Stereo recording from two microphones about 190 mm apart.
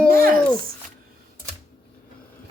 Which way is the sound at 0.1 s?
50° right (ahead or behind).